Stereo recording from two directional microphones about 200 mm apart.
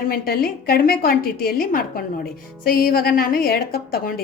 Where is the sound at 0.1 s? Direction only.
50° left (ahead or behind).